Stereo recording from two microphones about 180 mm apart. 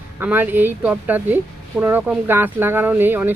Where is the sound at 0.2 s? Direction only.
10° right (ahead or behind).